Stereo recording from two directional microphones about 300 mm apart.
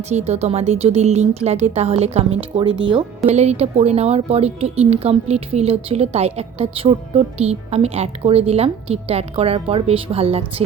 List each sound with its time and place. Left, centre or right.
0.1 s speech: right